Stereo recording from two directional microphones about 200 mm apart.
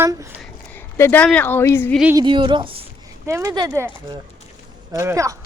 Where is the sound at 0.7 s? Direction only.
10° left (ahead or behind).